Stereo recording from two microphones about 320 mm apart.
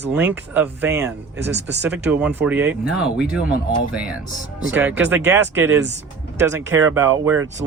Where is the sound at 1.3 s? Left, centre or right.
Right.